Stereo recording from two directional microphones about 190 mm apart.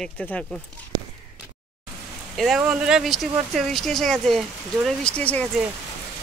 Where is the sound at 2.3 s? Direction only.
Centre (ahead or behind).